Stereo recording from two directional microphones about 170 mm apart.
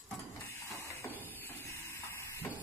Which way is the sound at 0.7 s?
15° left (ahead or behind).